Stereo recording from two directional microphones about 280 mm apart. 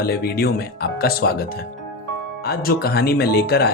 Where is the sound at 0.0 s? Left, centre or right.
Left.